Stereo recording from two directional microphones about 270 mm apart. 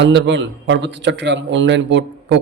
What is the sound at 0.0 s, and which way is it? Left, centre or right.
A man's voice, right.